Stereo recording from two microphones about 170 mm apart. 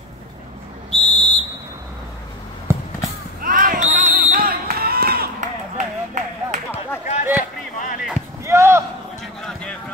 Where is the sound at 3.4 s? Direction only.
55° right (ahead or behind).